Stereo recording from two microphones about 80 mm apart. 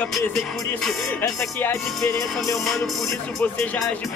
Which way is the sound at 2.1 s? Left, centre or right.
Left.